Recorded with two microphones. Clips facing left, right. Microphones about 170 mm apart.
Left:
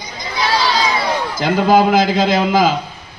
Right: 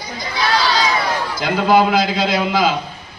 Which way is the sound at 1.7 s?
45° left (ahead or behind).